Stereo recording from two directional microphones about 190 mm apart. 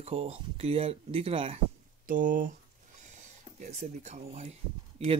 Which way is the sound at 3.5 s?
40° right (ahead or behind).